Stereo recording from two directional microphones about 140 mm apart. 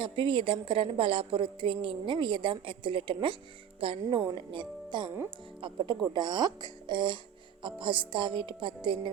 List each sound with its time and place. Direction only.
0.0 s a woman's voice: 40° right (ahead or behind)